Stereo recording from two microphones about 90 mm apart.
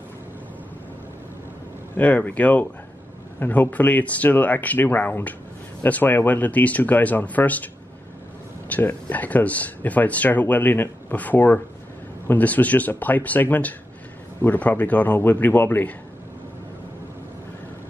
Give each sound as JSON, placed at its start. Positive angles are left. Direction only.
{"t": 2.0, "sound": "speech", "side_deg": 20}